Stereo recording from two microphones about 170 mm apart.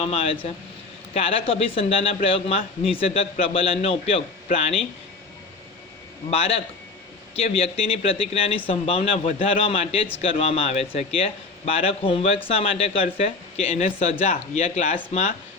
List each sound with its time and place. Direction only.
0.0 s speech: 35° left (ahead or behind)
6.3 s speech: 35° left (ahead or behind)